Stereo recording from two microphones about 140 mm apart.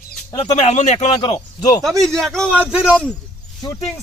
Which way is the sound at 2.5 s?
10° right (ahead or behind).